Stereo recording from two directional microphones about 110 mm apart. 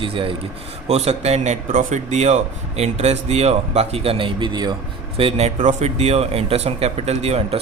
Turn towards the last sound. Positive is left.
turn(degrees=-75)  # may be behind; listen again after turning